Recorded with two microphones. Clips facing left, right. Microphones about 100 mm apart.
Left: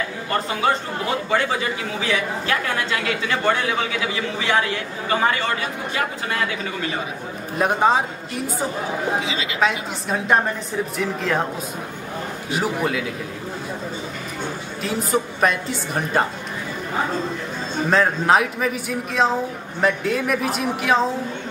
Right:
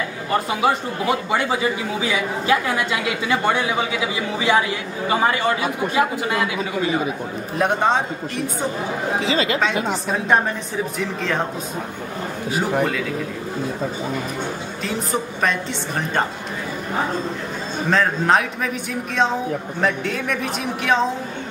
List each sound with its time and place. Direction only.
0.3 s a woman's voice: 15° right (ahead or behind)
7.5 s speech: centre (ahead or behind)
9.2 s speech: 45° right (ahead or behind)
10.0 s speech: centre (ahead or behind)
14.8 s speech: 5° left (ahead or behind)
17.8 s speech: 5° left (ahead or behind)